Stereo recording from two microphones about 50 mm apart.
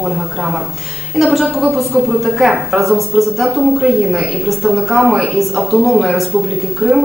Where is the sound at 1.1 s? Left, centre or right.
Centre.